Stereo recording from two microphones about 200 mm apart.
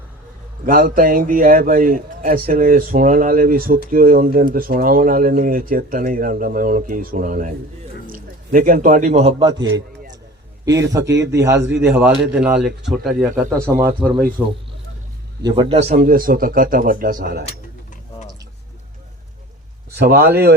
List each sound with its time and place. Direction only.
0.6 s a man's voice: 45° right (ahead or behind)
11.0 s speech: 15° right (ahead or behind); by 13.7 s centre (ahead or behind)
13.7 s speech: 10° right (ahead or behind)
15.4 s a man's voice: 25° right (ahead or behind)
15.8 s speech: 50° right (ahead or behind)
19.9 s speech: 50° right (ahead or behind)